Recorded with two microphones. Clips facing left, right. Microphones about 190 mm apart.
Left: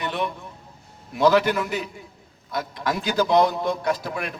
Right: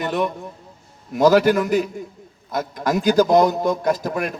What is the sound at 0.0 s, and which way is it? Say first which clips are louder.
A man's voice: right 5 dB; 45° right (ahead or behind).